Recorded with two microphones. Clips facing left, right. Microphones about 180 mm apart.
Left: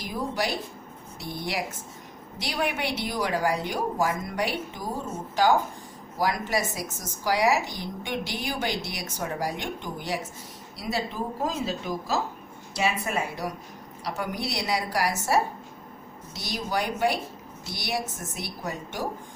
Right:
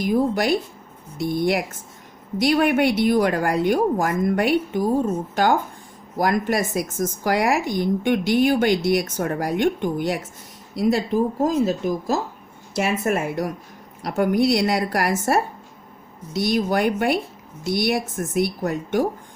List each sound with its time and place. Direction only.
0.0 s a woman's voice: 55° right (ahead or behind)
16.4 s a woman's voice: 55° right (ahead or behind)